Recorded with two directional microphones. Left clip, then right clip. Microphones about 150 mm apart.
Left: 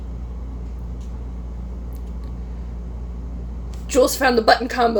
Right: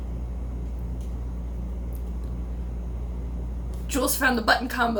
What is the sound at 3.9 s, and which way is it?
Speech, 35° left (ahead or behind).